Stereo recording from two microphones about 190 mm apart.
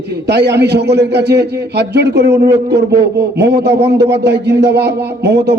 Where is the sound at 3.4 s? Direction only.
60° right (ahead or behind).